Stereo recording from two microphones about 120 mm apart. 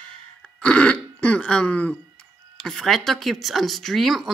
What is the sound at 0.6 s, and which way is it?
Throat clearing, 10° left (ahead or behind).